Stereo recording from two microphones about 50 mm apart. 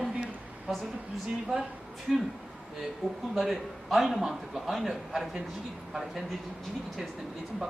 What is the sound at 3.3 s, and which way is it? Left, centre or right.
Speech, centre.